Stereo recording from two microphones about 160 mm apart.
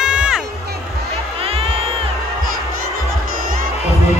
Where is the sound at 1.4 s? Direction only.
40° right (ahead or behind).